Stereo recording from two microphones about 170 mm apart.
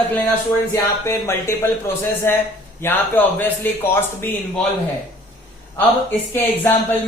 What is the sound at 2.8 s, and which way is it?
Speech, 10° left (ahead or behind).